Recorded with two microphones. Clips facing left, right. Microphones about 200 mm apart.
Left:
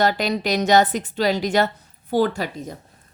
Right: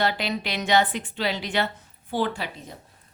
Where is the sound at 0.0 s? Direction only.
45° left (ahead or behind).